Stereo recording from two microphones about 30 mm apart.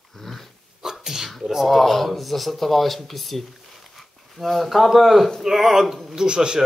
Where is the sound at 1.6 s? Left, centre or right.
Centre.